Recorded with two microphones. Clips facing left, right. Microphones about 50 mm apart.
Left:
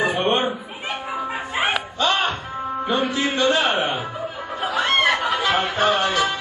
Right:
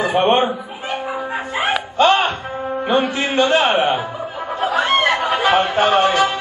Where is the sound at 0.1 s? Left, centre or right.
Right.